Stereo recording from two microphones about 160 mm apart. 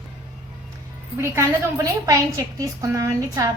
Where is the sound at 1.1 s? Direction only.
15° right (ahead or behind).